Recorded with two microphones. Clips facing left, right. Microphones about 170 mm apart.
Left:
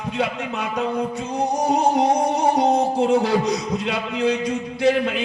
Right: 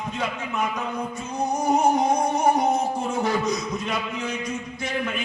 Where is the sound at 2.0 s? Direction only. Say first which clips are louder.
Left 3 dB; 30° left (ahead or behind).